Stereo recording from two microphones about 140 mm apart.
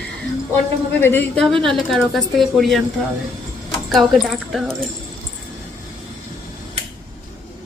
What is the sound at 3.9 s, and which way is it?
Speech, centre (ahead or behind).